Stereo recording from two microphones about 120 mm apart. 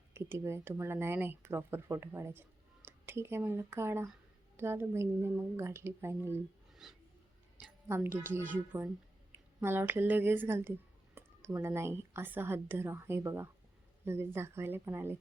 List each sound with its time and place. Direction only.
0.1 s speech: 20° right (ahead or behind)
6.8 s a sound: 5° right (ahead or behind)
7.6 s a woman's voice: 20° right (ahead or behind)